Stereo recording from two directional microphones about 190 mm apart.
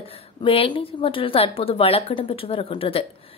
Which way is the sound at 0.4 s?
25° left (ahead or behind).